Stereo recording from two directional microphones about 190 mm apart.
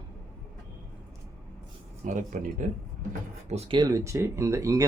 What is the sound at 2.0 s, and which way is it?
Speech, 40° right (ahead or behind).